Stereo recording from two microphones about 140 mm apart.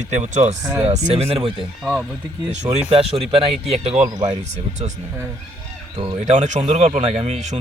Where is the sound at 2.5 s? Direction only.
50° right (ahead or behind).